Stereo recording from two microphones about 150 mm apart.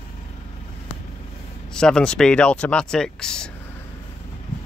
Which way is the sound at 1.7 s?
5° left (ahead or behind).